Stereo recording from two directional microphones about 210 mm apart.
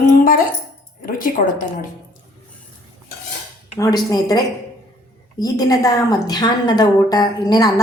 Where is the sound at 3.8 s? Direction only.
15° left (ahead or behind).